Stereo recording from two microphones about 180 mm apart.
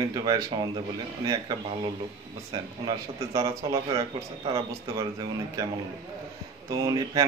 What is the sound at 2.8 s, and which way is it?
Speech, 20° right (ahead or behind).